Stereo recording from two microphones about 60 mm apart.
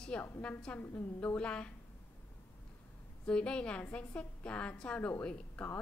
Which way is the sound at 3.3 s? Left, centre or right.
Centre.